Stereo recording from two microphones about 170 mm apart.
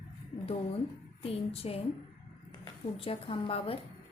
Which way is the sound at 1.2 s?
35° left (ahead or behind).